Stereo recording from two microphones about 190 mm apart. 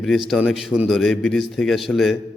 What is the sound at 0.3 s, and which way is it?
A man's voice, centre (ahead or behind).